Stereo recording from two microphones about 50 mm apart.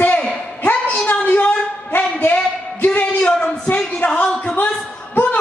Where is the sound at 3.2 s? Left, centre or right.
Left.